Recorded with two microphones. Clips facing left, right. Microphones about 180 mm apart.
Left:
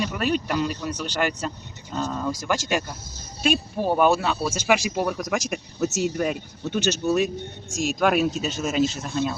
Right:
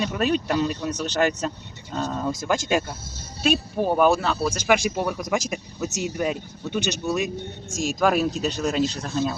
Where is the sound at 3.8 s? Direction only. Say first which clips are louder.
Even; centre (ahead or behind).